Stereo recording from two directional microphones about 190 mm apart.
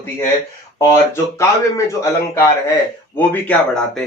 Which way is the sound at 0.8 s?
15° left (ahead or behind).